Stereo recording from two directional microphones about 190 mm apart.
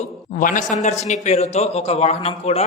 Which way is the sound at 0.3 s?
45° left (ahead or behind).